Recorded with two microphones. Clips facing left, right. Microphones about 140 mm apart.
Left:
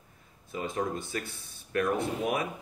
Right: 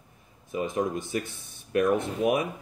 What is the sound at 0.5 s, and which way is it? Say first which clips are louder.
Speech: right 4 dB; 15° right (ahead or behind).